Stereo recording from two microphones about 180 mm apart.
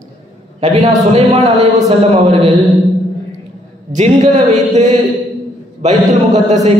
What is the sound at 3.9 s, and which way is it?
A man's voice, 40° right (ahead or behind).